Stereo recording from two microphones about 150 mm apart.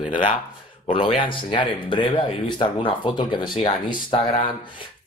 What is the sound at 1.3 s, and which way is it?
Speech, 35° left (ahead or behind).